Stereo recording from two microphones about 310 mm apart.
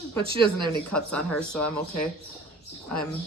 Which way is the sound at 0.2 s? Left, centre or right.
Centre.